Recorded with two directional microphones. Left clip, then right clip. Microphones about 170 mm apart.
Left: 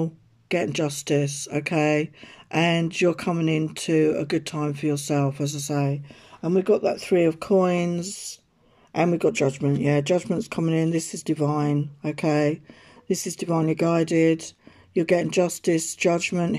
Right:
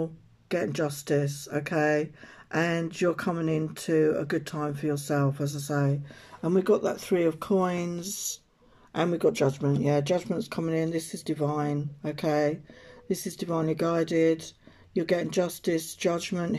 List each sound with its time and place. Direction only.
0.0 s speech: 15° left (ahead or behind)
6.4 s speech: 5° left (ahead or behind)